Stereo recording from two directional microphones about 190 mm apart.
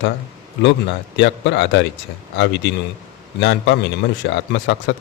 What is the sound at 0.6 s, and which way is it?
A man's voice, 70° left (ahead or behind).